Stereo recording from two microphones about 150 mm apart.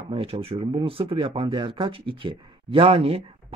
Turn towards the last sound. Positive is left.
turn(degrees=-40)  # may be behind; listen again after turning